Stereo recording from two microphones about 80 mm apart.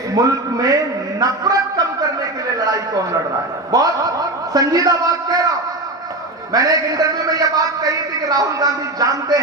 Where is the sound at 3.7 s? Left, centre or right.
Right.